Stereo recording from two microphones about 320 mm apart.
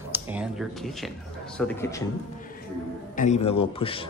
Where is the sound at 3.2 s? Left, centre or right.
Centre.